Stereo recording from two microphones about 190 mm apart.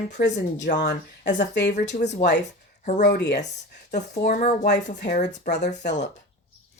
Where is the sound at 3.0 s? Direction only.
60° left (ahead or behind).